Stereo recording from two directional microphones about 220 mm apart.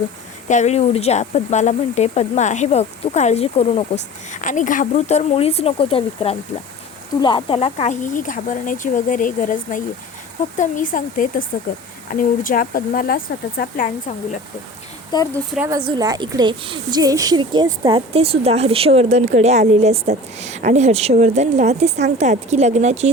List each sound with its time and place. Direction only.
0.4 s speech: 30° left (ahead or behind)
15.1 s speech: 15° left (ahead or behind)
15.5 s speech: 10° right (ahead or behind); by 23.0 s 30° right (ahead or behind)